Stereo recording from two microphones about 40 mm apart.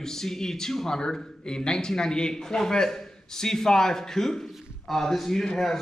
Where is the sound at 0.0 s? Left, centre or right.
Centre.